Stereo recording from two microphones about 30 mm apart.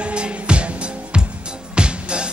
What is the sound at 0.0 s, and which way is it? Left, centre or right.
Music, right.